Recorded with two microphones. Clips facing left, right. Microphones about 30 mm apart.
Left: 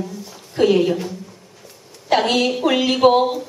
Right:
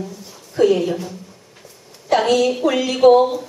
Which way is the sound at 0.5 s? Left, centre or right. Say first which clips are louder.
Even; left.